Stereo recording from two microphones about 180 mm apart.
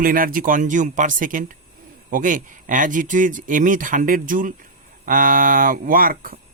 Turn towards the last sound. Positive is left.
turn(degrees=-50)  # may be behind; listen again after turning